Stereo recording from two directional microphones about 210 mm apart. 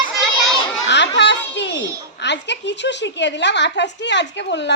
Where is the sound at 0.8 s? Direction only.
55° left (ahead or behind).